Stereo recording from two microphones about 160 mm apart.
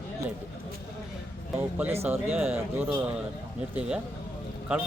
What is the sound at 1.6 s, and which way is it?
Speech, 10° right (ahead or behind).